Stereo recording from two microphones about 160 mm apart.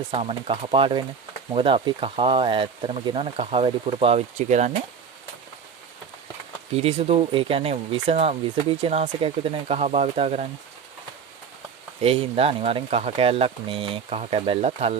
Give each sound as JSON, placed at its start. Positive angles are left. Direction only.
{"t": 0.1, "sound": "speech", "side_deg": -40}
{"t": 6.7, "sound": "speech", "side_deg": -40}
{"t": 12.0, "sound": "speech", "side_deg": -35}